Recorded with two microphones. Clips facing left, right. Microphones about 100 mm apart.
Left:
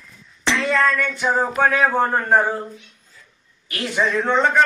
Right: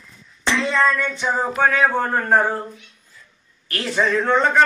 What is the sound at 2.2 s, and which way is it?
Speech, 5° left (ahead or behind).